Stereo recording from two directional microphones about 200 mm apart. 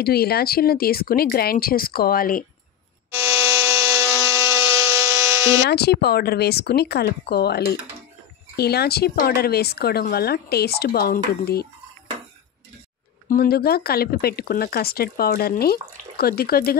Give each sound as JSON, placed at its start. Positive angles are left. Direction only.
{"t": 0.0, "sound": "speech", "side_deg": 50}
{"t": 3.7, "sound": "wood", "side_deg": -15}
{"t": 5.2, "sound": "electric toothbrush", "side_deg": -15}
{"t": 5.7, "sound": "speech", "side_deg": 55}
{"t": 13.3, "sound": "speech", "side_deg": 50}